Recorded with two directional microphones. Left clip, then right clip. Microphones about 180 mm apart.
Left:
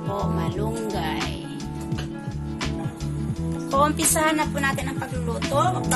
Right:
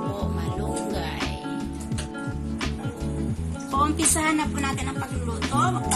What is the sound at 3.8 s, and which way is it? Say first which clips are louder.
Music: left 2 dB; 60° left (ahead or behind).